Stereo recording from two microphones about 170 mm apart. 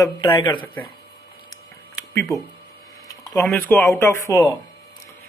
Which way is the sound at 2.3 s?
20° left (ahead or behind).